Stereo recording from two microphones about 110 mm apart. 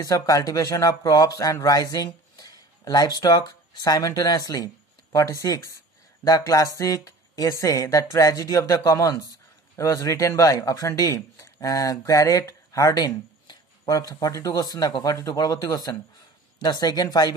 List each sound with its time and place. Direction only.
0.0 s speech: 35° left (ahead or behind)